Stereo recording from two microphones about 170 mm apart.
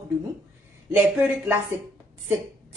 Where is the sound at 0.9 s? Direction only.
10° right (ahead or behind).